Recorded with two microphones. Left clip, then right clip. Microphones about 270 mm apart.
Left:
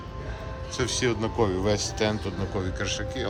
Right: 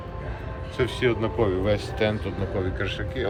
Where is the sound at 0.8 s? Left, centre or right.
Centre.